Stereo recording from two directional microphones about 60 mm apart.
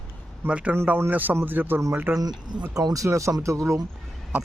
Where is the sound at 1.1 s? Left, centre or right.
Right.